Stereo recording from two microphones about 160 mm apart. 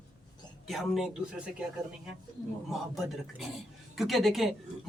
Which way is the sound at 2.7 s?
Centre (ahead or behind).